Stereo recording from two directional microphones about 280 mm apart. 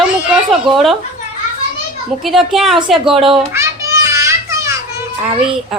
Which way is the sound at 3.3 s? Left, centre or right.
Centre.